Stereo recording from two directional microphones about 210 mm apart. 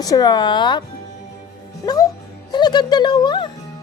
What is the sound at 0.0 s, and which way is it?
Speech, 20° left (ahead or behind).